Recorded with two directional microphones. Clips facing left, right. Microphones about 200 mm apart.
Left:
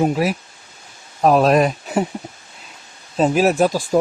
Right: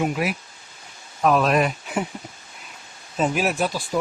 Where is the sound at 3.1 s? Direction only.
35° left (ahead or behind).